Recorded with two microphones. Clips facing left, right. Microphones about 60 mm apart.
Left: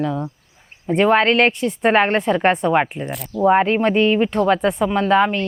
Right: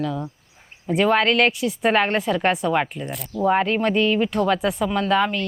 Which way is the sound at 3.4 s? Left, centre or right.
Centre.